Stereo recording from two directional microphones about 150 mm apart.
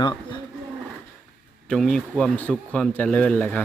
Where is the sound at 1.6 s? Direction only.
5° left (ahead or behind).